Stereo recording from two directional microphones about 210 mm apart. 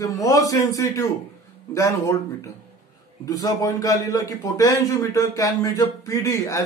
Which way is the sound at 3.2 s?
15° left (ahead or behind).